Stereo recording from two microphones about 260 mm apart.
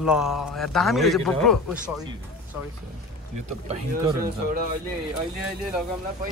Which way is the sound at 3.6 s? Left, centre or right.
Right.